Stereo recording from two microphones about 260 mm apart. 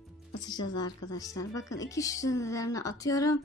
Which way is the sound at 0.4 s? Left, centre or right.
Centre.